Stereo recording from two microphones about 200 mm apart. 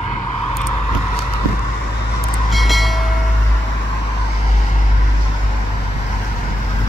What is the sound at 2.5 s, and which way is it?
Train, centre (ahead or behind).